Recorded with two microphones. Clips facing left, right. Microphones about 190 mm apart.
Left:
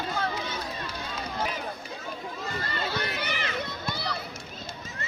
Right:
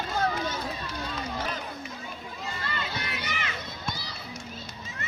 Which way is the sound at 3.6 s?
60° left (ahead or behind).